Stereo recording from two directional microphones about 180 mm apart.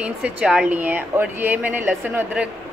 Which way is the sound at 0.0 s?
5° right (ahead or behind).